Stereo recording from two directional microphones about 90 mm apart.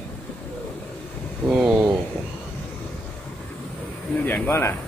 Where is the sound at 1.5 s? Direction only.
10° right (ahead or behind).